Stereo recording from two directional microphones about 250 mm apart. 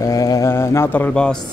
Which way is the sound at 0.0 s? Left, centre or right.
Centre.